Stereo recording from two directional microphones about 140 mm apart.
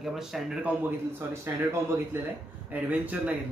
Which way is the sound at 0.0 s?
Centre (ahead or behind).